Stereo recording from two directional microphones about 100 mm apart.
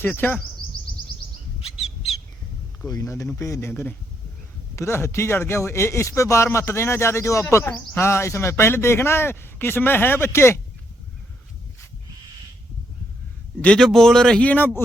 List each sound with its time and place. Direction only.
0.0 s speech: 20° left (ahead or behind)
2.9 s speech: 30° left (ahead or behind)
13.6 s a man's voice: 10° left (ahead or behind)